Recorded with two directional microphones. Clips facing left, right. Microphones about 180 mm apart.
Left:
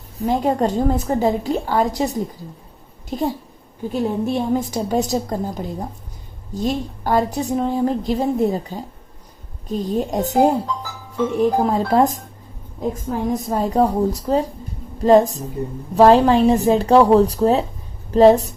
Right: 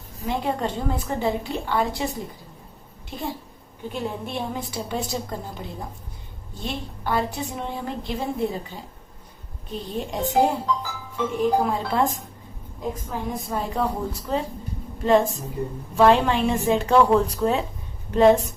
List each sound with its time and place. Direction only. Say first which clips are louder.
0.3 s a woman's voice: left 7 dB; 40° left (ahead or behind)
13.3 s a woman's voice: left 9 dB; 40° left (ahead or behind)